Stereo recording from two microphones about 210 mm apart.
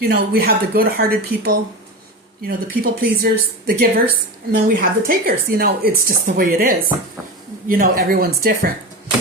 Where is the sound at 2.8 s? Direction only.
45° right (ahead or behind).